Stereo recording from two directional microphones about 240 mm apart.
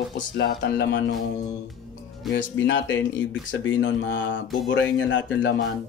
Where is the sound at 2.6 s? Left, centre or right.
Left.